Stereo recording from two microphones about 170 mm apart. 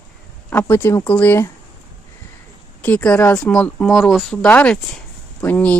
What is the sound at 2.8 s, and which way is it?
Speech, 10° left (ahead or behind).